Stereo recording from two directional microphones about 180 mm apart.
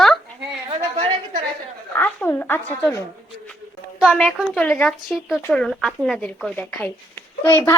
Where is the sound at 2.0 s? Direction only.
10° left (ahead or behind).